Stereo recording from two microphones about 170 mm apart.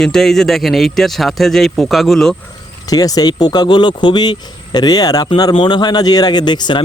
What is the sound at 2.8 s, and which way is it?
Speech, 20° left (ahead or behind).